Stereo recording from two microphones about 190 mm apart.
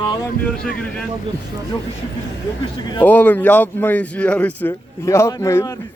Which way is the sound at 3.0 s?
10° left (ahead or behind).